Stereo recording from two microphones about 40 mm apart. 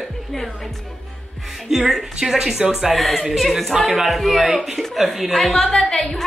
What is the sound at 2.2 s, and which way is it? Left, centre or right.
Music, centre.